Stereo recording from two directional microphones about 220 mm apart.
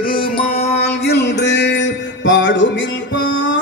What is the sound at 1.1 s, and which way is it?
Music, 50° left (ahead or behind).